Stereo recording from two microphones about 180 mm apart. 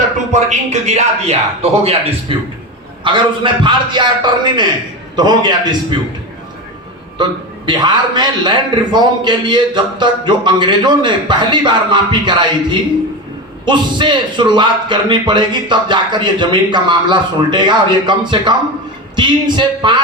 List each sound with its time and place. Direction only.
0.3 s a man's voice: 40° right (ahead or behind); by 5.7 s 25° right (ahead or behind)
7.2 s a man's voice: 25° right (ahead or behind)
13.7 s a man's voice: 25° right (ahead or behind)